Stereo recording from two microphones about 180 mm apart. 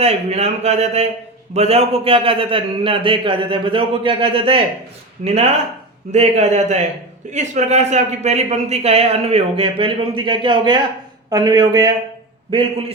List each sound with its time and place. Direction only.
0.0 s a man's voice: 35° right (ahead or behind)